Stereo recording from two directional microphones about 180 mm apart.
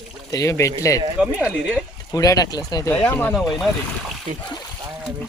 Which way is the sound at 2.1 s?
20° left (ahead or behind).